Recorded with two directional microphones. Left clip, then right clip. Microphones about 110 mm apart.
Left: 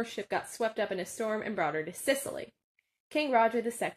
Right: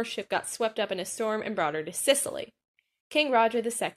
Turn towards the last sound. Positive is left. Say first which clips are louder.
# right 3 dB
turn(degrees=-15)  # may be behind; listen again after turning